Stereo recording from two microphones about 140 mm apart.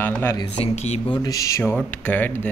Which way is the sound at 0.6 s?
50° left (ahead or behind).